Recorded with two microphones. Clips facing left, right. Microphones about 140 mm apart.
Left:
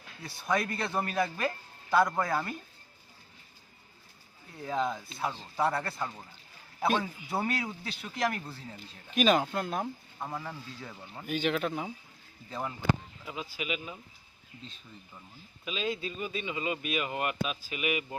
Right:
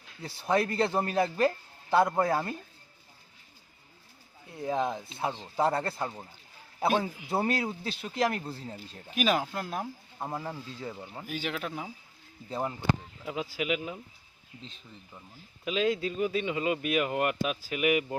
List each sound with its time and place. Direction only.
0.2 s a man's voice: 30° right (ahead or behind)
4.6 s a man's voice: 20° right (ahead or behind)
7.3 s a man's voice: 30° right (ahead or behind)
9.1 s speech: 5° right (ahead or behind)
10.2 s a man's voice: 25° right (ahead or behind)
10.9 s speech: 10° right (ahead or behind)
12.5 s speech: 30° right (ahead or behind)
13.2 s speech: 70° right (ahead or behind)
15.6 s speech: 70° right (ahead or behind)